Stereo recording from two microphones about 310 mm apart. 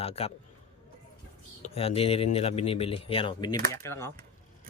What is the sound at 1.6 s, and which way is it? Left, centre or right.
Speech, centre.